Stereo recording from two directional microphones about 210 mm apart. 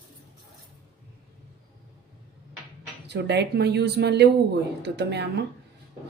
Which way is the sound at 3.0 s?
55° right (ahead or behind).